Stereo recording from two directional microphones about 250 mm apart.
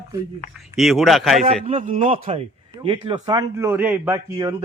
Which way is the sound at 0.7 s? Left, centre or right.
Centre.